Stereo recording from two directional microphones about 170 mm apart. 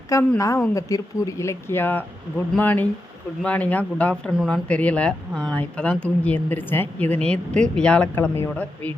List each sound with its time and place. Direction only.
0.3 s speech: 20° left (ahead or behind)